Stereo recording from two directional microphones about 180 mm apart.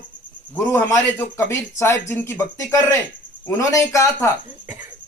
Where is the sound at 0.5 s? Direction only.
15° left (ahead or behind).